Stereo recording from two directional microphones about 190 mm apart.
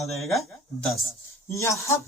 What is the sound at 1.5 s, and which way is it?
Speech, 15° left (ahead or behind).